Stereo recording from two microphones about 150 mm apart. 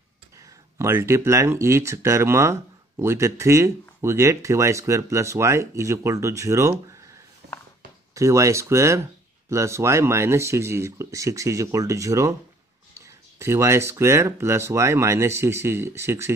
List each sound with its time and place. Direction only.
0.7 s speech: 15° right (ahead or behind)
8.1 s speech: 20° right (ahead or behind)